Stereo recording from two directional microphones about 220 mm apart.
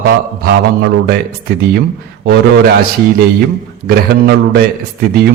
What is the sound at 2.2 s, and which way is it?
Speech, 50° right (ahead or behind).